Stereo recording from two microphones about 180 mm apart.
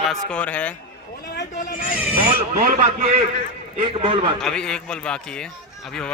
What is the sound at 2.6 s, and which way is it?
Speech, 45° right (ahead or behind).